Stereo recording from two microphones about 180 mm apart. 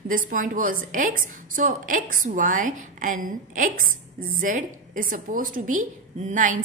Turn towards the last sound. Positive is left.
turn(degrees=-45)  # may be behind; listen again after turning